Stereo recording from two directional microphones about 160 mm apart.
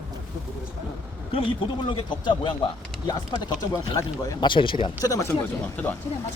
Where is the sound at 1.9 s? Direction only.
30° left (ahead or behind).